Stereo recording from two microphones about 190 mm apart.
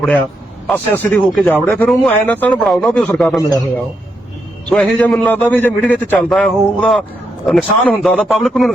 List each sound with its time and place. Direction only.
0.7 s a man's voice: 10° left (ahead or behind)
3.3 s a man's voice: 20° left (ahead or behind)
4.7 s a man's voice: 5° left (ahead or behind)